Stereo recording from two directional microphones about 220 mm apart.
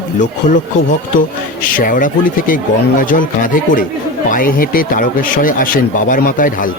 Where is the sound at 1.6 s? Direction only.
40° left (ahead or behind).